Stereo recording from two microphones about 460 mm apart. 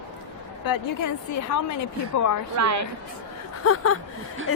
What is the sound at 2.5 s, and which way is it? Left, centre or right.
Speech, right.